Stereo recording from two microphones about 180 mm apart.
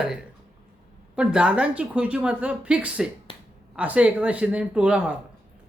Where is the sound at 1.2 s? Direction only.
5° right (ahead or behind).